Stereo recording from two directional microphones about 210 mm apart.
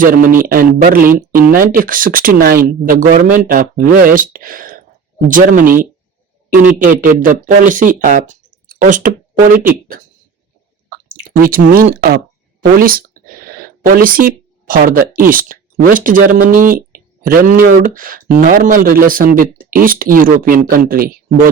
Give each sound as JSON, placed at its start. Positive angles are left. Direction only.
{"t": 0.0, "sound": "speech", "side_deg": -40}
{"t": 11.1, "sound": "speech", "side_deg": -45}